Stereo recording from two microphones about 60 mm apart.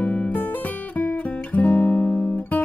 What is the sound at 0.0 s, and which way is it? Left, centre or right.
Music, left.